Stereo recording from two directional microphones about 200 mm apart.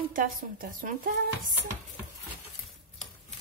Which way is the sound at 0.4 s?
45° right (ahead or behind).